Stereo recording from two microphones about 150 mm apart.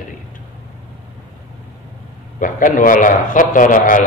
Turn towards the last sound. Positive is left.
turn(degrees=60)  # may be behind; listen again after turning